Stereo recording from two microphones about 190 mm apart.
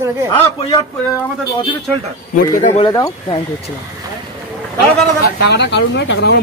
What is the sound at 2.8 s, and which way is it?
Speech, 25° left (ahead or behind).